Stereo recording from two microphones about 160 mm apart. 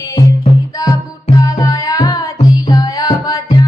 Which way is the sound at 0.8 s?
20° left (ahead or behind).